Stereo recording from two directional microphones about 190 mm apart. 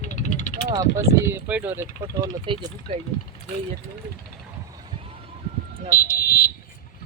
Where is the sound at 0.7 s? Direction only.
20° right (ahead or behind).